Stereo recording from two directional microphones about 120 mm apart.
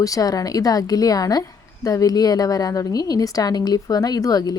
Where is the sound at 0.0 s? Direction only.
30° left (ahead or behind).